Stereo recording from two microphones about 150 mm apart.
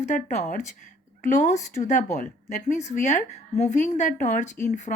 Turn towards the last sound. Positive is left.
turn(degrees=55)  # may be behind; listen again after turning